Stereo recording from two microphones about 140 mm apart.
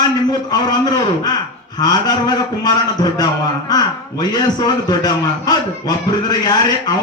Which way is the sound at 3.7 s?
30° left (ahead or behind).